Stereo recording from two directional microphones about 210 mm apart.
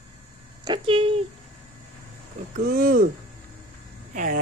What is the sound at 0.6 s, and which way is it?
Speech, 25° right (ahead or behind).